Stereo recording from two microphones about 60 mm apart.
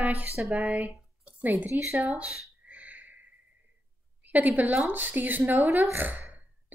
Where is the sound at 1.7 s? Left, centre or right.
Right.